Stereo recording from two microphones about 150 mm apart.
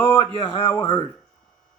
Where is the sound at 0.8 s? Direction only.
35° left (ahead or behind).